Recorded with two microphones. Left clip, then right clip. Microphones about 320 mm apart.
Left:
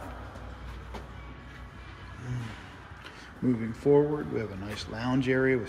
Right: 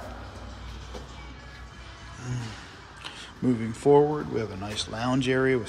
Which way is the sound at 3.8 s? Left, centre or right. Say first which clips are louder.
Right 4 dB; centre.